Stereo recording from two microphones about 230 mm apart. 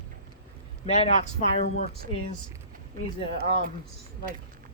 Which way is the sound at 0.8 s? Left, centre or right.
Left.